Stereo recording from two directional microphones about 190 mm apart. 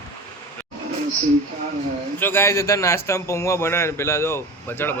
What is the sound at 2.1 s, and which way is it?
A man's voice, 10° left (ahead or behind).